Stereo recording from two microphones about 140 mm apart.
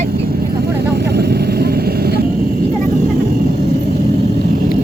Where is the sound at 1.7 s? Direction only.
90° right.